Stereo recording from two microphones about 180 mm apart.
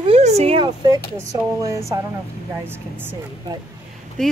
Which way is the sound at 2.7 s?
10° right (ahead or behind).